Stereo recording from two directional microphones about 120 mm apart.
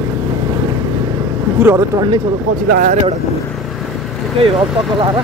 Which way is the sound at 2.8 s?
90° right.